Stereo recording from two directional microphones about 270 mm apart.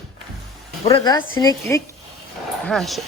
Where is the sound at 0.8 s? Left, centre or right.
Centre.